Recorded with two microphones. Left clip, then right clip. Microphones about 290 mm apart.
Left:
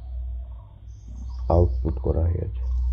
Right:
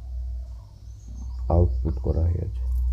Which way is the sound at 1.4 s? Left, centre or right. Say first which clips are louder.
Left 3 dB; left.